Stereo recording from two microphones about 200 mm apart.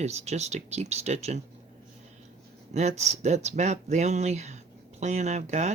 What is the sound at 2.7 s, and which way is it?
Speech, 35° right (ahead or behind).